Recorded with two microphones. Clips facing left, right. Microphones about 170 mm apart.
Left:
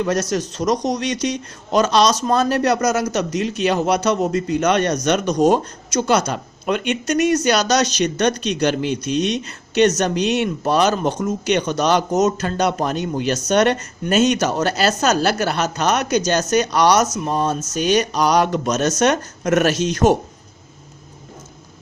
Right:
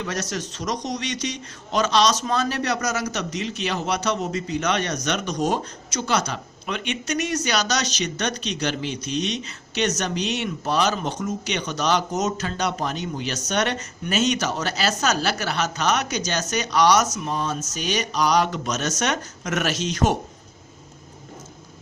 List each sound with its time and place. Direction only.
0.0 s speech: 45° left (ahead or behind)